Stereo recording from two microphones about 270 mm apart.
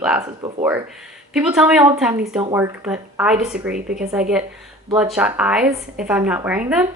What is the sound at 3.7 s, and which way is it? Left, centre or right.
Speech, right.